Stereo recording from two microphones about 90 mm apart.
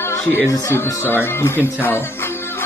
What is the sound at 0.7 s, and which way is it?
Speech, 35° left (ahead or behind).